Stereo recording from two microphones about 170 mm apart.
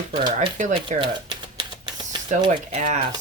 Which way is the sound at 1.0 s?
30° right (ahead or behind).